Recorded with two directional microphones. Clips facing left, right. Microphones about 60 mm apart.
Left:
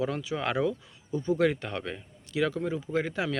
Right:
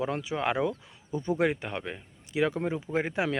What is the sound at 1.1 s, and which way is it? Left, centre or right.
Speech, right.